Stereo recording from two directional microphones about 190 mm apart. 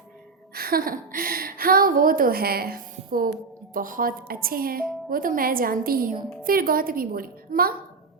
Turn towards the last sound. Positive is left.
turn(degrees=-50)  # may be behind; listen again after turning